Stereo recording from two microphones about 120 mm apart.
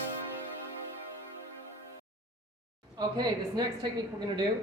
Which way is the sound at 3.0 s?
35° right (ahead or behind).